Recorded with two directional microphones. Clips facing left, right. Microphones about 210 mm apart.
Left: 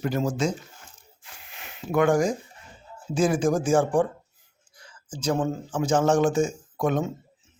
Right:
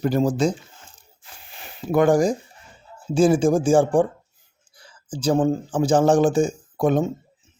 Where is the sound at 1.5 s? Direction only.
35° right (ahead or behind).